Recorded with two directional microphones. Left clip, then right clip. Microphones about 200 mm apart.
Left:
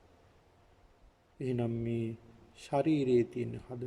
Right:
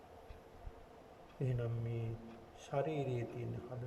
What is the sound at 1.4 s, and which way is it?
Speech, 45° left (ahead or behind).